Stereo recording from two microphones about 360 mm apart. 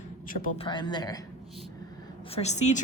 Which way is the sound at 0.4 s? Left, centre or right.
Centre.